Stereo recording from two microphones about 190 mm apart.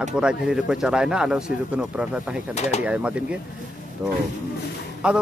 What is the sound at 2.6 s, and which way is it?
Speech, 35° left (ahead or behind).